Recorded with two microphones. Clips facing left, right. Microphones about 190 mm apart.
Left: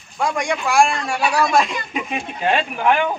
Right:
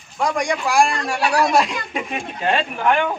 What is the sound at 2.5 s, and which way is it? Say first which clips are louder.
Speech: left 1 dB; 5° left (ahead or behind).